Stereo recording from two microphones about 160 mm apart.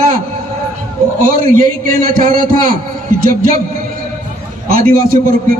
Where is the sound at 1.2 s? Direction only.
65° right (ahead or behind).